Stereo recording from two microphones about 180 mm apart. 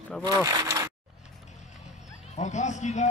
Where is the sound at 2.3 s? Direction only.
40° left (ahead or behind).